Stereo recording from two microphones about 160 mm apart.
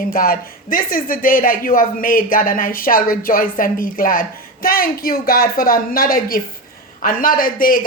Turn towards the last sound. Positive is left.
turn(degrees=60)  # may be behind; listen again after turning